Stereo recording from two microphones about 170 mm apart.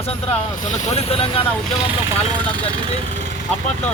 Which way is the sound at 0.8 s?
35° left (ahead or behind).